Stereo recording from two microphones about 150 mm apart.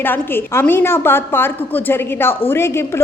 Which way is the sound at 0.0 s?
15° left (ahead or behind).